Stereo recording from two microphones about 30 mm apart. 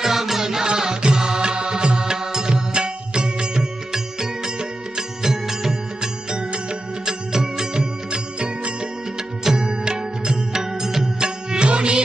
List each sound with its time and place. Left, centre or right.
0.0 s music: centre
0.4 s music: right
2.1 s music: centre
6.3 s music: right
7.0 s music: centre
8.1 s music: right; by 11.3 s centre
11.5 s music: right